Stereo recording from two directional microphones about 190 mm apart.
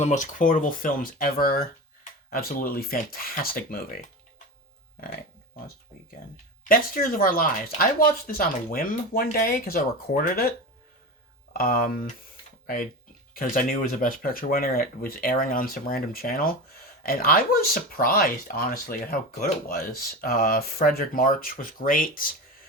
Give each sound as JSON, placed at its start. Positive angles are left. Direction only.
{"t": 0.0, "sound": "speech", "side_deg": 40}
{"t": 6.7, "sound": "speech", "side_deg": 45}
{"t": 11.5, "sound": "speech", "side_deg": 50}